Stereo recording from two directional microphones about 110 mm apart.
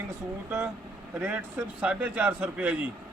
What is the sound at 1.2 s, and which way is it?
A man's voice, 15° right (ahead or behind).